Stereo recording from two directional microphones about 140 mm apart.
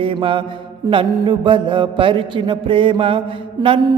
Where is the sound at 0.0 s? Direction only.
40° right (ahead or behind).